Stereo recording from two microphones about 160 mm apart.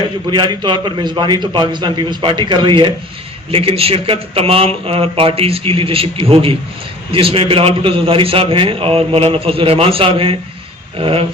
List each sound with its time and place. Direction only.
0.3 s a man's voice: 30° right (ahead or behind)